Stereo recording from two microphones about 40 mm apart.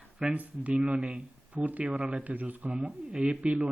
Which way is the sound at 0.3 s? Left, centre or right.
Right.